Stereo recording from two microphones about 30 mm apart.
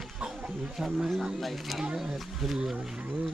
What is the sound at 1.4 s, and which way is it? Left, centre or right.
Speech, centre.